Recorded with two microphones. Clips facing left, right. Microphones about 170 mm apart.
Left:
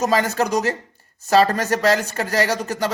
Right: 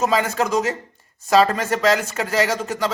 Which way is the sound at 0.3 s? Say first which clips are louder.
Even; 40° left (ahead or behind).